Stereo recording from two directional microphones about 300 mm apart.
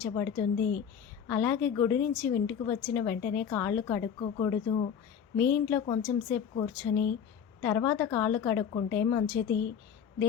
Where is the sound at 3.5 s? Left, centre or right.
Centre.